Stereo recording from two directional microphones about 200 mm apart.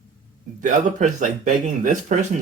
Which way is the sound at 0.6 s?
40° right (ahead or behind).